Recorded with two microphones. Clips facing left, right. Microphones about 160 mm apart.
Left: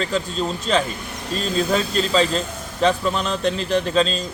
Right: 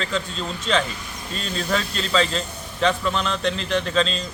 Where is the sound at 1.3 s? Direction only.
40° left (ahead or behind).